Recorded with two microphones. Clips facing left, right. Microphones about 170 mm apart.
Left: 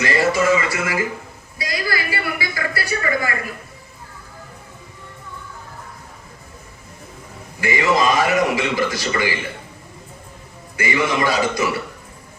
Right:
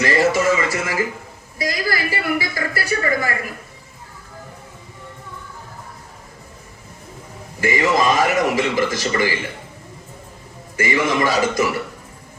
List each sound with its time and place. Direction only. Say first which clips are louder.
0.0 s a sound: right 1 dB; 40° right (ahead or behind)
1.7 s speech: left 1 dB; 40° right (ahead or behind)
7.6 s a man's voice: even; 45° right (ahead or behind)
10.8 s a man's voice: right 1 dB; 45° right (ahead or behind)